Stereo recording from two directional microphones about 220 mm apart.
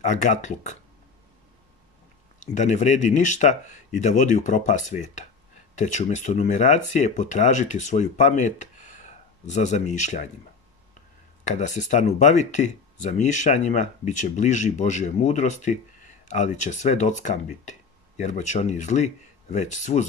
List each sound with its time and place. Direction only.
0.0 s speech: 35° left (ahead or behind)
2.4 s speech: 35° left (ahead or behind)
9.5 s speech: 30° left (ahead or behind)
11.5 s speech: 35° left (ahead or behind)